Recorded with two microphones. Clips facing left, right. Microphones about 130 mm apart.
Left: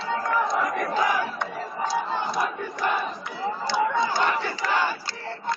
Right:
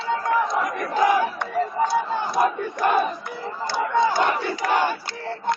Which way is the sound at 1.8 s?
55° right (ahead or behind).